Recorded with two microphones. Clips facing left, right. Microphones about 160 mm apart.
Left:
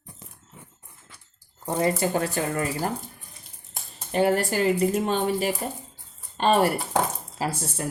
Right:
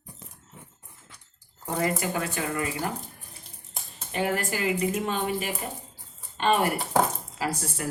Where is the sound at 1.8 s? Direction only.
35° left (ahead or behind).